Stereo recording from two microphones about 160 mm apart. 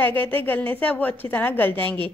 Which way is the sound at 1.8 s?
30° right (ahead or behind).